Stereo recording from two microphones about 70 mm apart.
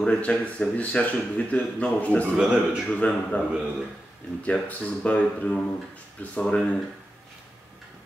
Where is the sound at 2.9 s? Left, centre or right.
Centre.